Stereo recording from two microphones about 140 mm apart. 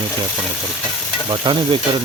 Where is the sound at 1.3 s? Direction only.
35° right (ahead or behind).